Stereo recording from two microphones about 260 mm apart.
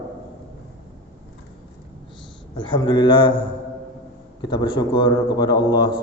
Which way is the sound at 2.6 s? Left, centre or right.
Centre.